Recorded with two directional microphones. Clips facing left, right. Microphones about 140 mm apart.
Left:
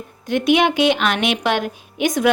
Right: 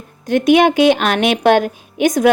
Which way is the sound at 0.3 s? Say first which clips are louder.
Right 5 dB; 45° right (ahead or behind).